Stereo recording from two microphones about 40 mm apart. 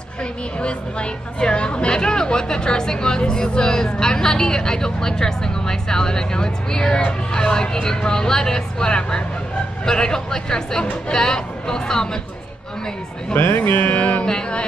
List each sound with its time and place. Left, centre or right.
0.2 s a woman's voice: left
13.6 s music: left
14.2 s music: left